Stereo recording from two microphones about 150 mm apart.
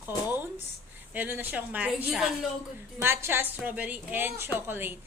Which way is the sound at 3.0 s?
15° right (ahead or behind).